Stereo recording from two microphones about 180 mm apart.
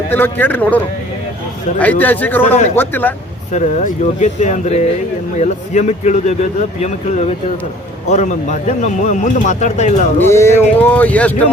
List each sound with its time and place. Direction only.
0.1 s speech: 10° left (ahead or behind)
1.8 s speech: 10° left (ahead or behind)
2.5 s speech: 40° left (ahead or behind)
2.7 s speech: 10° left (ahead or behind)
3.5 s speech: 40° left (ahead or behind)
10.2 s speech: 15° left (ahead or behind)